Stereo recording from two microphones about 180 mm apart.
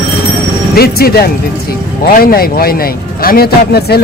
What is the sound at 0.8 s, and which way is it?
A man's voice, 60° left (ahead or behind).